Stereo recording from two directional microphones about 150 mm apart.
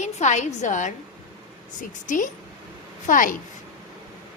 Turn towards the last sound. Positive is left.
turn(degrees=60)  # may be behind; listen again after turning